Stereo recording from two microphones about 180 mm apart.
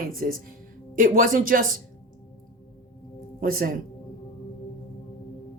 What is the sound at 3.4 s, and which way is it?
Speech, 55° right (ahead or behind).